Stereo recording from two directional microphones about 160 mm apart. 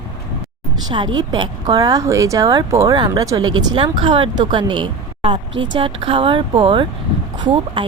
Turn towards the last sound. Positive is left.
turn(degrees=-30)  # may be behind; listen again after turning